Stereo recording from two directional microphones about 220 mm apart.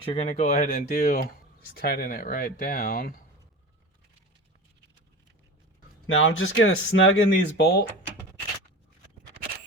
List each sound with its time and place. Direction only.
0.0 s speech: 25° left (ahead or behind); by 3.2 s 40° left (ahead or behind)
6.1 s speech: 65° left (ahead or behind)